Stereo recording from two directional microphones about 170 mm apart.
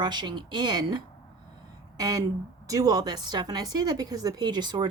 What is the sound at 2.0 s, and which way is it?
A woman's voice, 20° right (ahead or behind).